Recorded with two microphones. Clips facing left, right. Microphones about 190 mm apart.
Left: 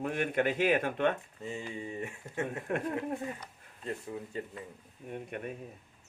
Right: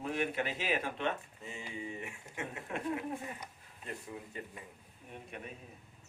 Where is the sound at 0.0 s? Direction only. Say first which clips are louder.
Left 5 dB; 55° left (ahead or behind).